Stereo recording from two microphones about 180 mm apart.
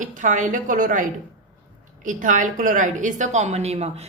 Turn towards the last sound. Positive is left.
turn(degrees=-35)  # may be behind; listen again after turning